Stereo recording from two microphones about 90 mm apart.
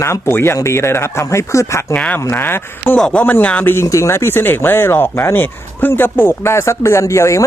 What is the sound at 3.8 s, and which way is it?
A man's voice, 35° left (ahead or behind).